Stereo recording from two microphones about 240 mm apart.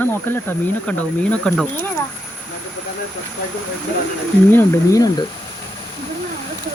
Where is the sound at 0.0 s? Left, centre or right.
Centre.